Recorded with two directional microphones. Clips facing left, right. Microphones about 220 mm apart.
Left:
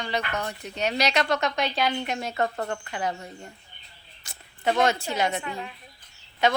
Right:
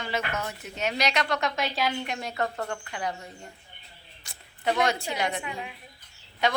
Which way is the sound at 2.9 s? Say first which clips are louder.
Left 3 dB; 45° left (ahead or behind).